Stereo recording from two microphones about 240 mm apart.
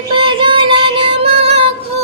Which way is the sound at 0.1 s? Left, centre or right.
Right.